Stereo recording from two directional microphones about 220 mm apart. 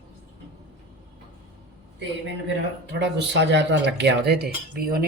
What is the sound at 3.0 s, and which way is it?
Speech, 50° right (ahead or behind).